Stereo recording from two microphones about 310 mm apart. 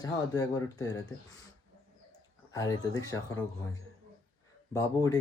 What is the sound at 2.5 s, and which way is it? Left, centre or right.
Speech, centre.